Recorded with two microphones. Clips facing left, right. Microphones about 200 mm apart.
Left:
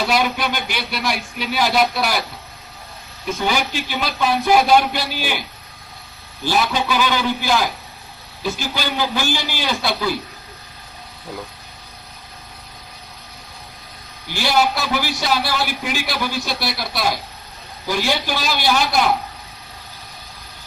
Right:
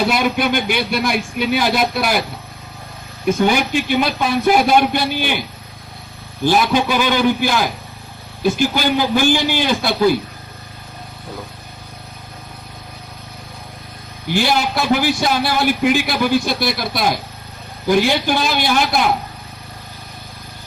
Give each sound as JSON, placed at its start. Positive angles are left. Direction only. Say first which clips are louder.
{"t": 0.1, "sound": "a man's voice", "louder": "right 3 dB", "side_deg": -50}
{"t": 3.2, "sound": "a man's voice", "louder": "right 6 dB", "side_deg": -50}
{"t": 6.4, "sound": "a man's voice", "louder": "right 5 dB", "side_deg": -50}
{"t": 14.3, "sound": "a man's voice", "louder": "right 1 dB", "side_deg": -50}